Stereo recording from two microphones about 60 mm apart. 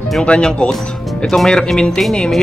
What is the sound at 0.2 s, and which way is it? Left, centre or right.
A man's voice, centre.